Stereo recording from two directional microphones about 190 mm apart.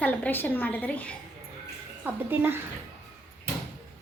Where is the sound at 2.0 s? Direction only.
10° right (ahead or behind).